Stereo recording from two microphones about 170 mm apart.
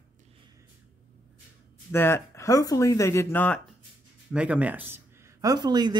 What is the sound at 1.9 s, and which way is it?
Speech, 15° left (ahead or behind).